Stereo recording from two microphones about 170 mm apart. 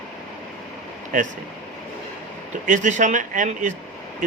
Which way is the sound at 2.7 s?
45° right (ahead or behind).